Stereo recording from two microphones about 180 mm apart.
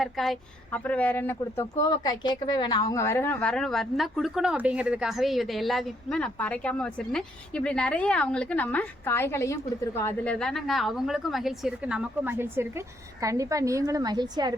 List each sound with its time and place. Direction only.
0.0 s a woman's voice: centre (ahead or behind)
1.8 s a woman's voice: 20° left (ahead or behind); by 14.5 s 25° right (ahead or behind)